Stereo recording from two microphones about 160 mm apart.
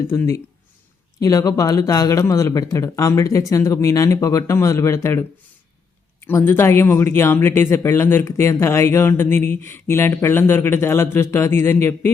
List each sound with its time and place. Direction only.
0.1 s speech: 15° left (ahead or behind)